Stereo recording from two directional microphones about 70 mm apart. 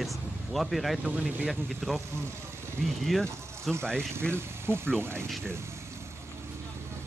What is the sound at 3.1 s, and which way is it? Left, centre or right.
Speech, centre.